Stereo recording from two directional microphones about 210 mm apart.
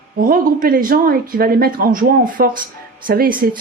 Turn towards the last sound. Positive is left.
turn(degrees=-45)  # may be behind; listen again after turning